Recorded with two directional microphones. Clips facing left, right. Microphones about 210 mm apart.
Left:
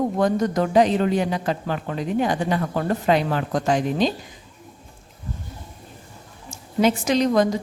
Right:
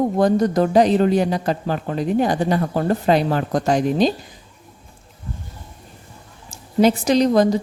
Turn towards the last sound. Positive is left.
turn(degrees=-35)  # may be behind; listen again after turning